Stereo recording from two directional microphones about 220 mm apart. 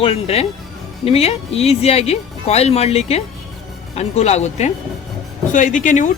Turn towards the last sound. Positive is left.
turn(degrees=35)  # may be behind; listen again after turning